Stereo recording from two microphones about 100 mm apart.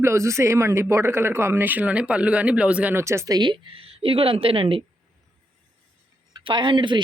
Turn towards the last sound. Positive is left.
turn(degrees=-55)  # may be behind; listen again after turning